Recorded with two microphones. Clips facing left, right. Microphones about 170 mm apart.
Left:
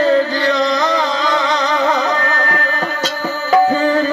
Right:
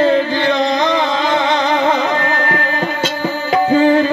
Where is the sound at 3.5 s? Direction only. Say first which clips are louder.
Right 1 dB; 40° left (ahead or behind).